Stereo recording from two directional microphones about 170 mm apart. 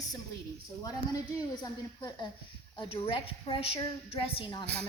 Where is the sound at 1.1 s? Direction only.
20° left (ahead or behind).